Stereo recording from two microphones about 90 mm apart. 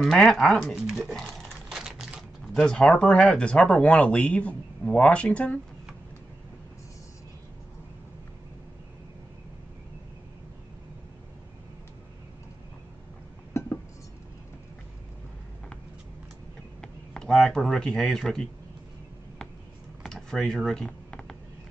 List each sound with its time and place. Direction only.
0.0 s speech: 5° left (ahead or behind)
1.7 s typewriter: 5° right (ahead or behind)
2.5 s speech: 5° left (ahead or behind)
13.5 s chink: 30° left (ahead or behind)
16.8 s speech: 10° left (ahead or behind)
20.0 s computer keyboard: 5° left (ahead or behind)